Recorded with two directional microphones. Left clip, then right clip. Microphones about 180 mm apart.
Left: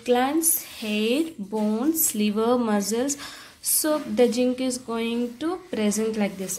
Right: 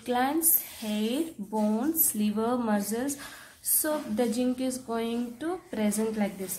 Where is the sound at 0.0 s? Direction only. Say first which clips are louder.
Left 5 dB; 15° left (ahead or behind).